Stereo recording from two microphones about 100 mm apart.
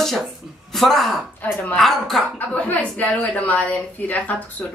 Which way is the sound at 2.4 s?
15° left (ahead or behind).